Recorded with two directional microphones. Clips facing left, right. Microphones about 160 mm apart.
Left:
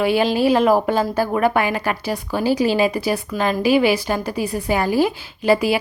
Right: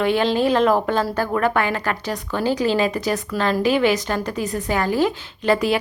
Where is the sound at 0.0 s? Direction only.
10° left (ahead or behind).